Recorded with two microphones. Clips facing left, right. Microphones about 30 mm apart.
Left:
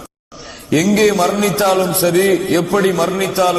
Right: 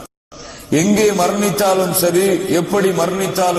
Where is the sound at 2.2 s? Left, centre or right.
Left.